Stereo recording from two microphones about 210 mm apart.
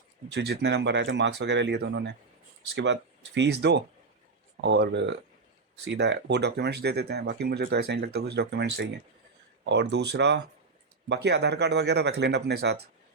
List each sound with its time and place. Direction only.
0.3 s speech: 55° right (ahead or behind)